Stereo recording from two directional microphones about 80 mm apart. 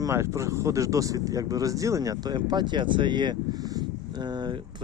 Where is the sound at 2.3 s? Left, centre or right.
Right.